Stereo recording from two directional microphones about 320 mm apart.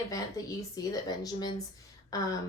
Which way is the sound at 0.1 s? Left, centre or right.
Centre.